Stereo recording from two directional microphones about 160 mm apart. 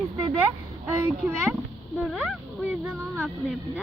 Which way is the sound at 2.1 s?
Centre (ahead or behind).